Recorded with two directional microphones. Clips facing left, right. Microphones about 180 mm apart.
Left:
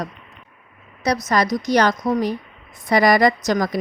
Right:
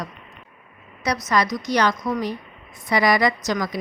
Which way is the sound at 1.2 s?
40° left (ahead or behind).